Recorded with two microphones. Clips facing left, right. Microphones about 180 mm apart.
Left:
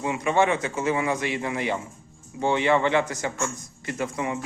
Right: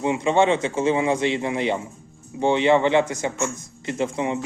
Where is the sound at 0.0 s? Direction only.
25° right (ahead or behind).